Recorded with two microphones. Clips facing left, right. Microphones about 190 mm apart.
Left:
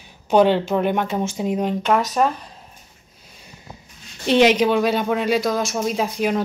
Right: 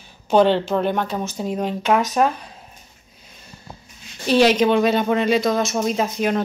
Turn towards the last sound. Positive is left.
turn(degrees=5)  # may be behind; listen again after turning